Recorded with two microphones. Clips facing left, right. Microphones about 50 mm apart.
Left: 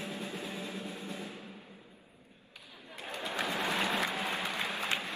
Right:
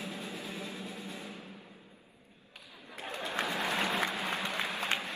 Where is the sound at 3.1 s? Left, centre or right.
Right.